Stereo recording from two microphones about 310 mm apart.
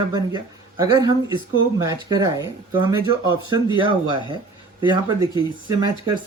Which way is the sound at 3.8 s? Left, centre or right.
Centre.